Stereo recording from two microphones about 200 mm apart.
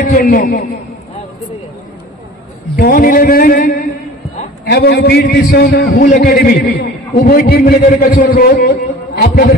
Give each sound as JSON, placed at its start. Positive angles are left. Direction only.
{"t": 0.0, "sound": "a man's voice", "side_deg": 45}
{"t": 2.8, "sound": "a man's voice", "side_deg": 45}